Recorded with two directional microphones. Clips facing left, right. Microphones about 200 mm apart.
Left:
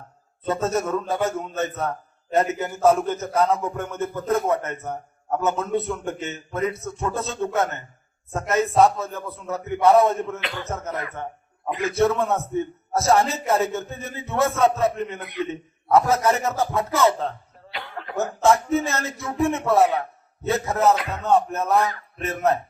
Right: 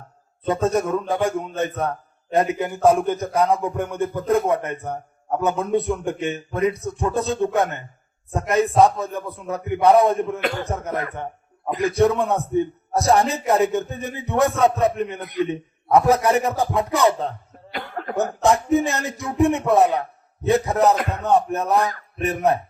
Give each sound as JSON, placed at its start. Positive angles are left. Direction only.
{"t": 0.4, "sound": "a man's voice", "side_deg": -15}
{"t": 11.7, "sound": "a man's voice", "side_deg": -35}
{"t": 11.9, "sound": "a man's voice", "side_deg": -15}
{"t": 17.7, "sound": "cough", "side_deg": -45}
{"t": 18.4, "sound": "a man's voice", "side_deg": -15}